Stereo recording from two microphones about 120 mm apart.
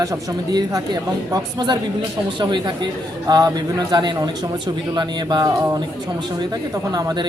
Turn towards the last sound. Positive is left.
turn(degrees=-30)  # may be behind; listen again after turning